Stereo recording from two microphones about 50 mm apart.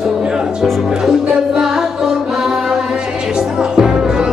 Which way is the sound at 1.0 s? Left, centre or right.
Centre.